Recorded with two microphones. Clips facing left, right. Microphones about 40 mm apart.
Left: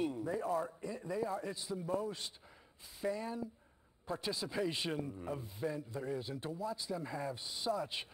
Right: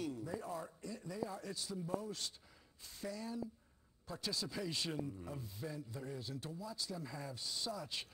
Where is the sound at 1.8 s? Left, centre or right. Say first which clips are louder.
Left 5 dB; left.